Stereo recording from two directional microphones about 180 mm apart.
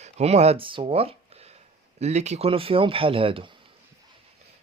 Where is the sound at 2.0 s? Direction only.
40° right (ahead or behind).